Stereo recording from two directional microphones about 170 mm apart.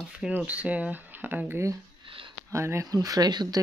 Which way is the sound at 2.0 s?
30° right (ahead or behind).